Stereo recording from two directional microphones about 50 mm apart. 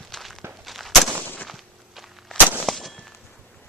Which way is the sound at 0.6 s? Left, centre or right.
Centre.